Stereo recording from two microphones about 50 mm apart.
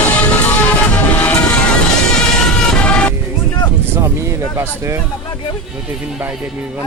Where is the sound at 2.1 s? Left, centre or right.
Centre.